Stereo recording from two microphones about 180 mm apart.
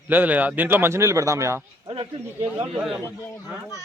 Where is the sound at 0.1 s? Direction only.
10° right (ahead or behind).